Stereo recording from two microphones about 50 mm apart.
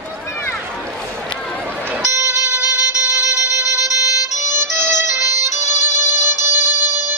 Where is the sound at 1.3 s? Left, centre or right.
Centre.